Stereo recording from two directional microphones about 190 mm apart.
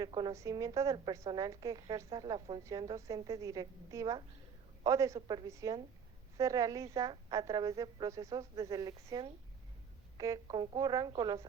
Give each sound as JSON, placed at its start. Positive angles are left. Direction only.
{"t": 0.0, "sound": "a woman's voice", "side_deg": -20}